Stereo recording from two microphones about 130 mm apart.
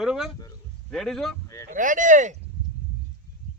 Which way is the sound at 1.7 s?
85° right.